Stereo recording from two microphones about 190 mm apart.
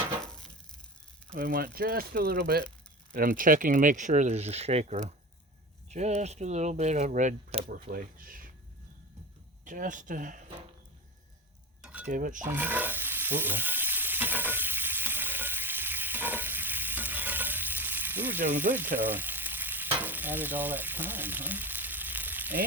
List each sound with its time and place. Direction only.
0.3 s a sound: 5° left (ahead or behind)
1.4 s speech: 45° right (ahead or behind)
3.1 s speech: 45° right (ahead or behind)
9.6 s speech: 45° right (ahead or behind)
11.8 s stir: 5° right (ahead or behind)
12.0 s speech: 45° right (ahead or behind)
12.4 s stir: 10° right (ahead or behind)
18.5 s speech: 10° right (ahead or behind)
18.9 s frying: 10° right (ahead or behind)